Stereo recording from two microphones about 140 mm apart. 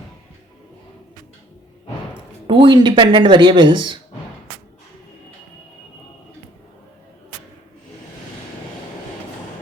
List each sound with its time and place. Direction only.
2.5 s speech: 35° right (ahead or behind)